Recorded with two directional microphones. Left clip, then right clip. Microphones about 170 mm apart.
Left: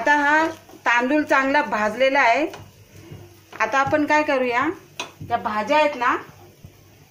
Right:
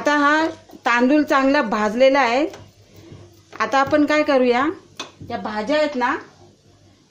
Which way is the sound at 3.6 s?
90° right.